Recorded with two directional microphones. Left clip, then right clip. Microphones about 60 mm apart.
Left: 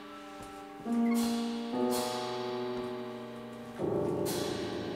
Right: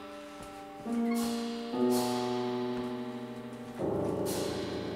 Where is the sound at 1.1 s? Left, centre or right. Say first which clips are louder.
Left 1 dB; left.